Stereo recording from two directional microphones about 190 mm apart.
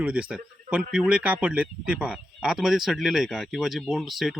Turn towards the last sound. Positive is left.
turn(degrees=0)  # may be behind; listen again after turning